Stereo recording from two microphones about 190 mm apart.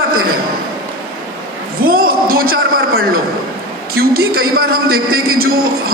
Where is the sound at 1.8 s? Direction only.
50° right (ahead or behind).